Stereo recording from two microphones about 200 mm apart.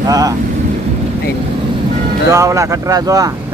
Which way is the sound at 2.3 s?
15° right (ahead or behind).